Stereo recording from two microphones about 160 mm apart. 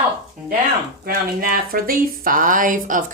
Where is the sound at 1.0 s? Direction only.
65° right (ahead or behind).